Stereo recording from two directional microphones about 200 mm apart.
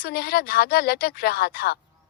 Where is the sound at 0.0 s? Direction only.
50° left (ahead or behind).